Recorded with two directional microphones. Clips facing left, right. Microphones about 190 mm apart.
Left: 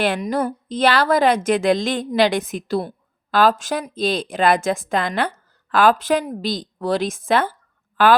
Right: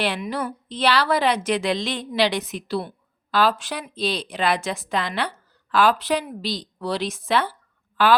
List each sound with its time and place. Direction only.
0.0 s a woman's voice: 45° left (ahead or behind)